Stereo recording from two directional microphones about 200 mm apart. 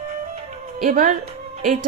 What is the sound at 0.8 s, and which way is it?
Music, 40° right (ahead or behind).